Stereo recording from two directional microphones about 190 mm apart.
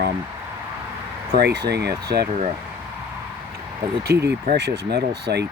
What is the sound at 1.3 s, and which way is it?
Speech, 60° right (ahead or behind).